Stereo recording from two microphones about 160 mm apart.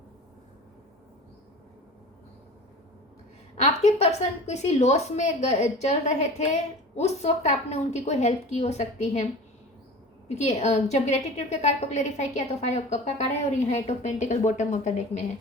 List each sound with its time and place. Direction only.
3.6 s a woman's voice: 45° left (ahead or behind)
10.2 s a woman's voice: 45° left (ahead or behind)